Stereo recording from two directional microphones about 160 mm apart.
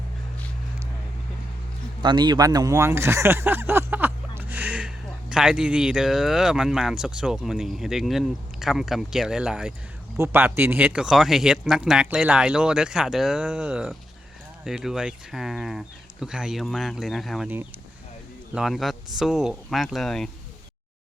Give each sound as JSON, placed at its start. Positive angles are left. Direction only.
{"t": 2.0, "sound": "a sound", "side_deg": -30}
{"t": 5.3, "sound": "speech", "side_deg": -5}
{"t": 18.5, "sound": "speech", "side_deg": 0}